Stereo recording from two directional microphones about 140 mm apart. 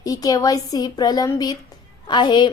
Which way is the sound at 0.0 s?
25° left (ahead or behind).